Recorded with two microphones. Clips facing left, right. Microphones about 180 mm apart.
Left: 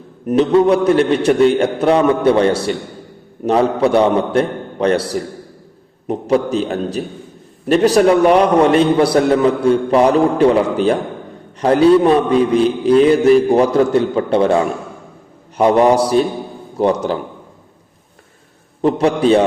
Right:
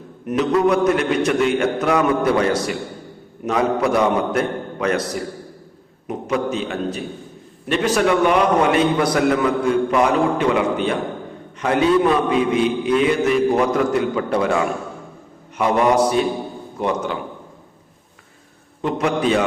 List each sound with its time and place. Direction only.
0.3 s a man's voice: 30° left (ahead or behind)
18.8 s a man's voice: 35° left (ahead or behind)